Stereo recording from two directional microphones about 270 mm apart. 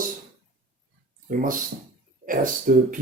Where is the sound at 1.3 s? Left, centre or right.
Right.